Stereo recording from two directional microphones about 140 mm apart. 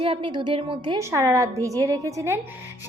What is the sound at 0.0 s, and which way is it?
Speech, 40° right (ahead or behind).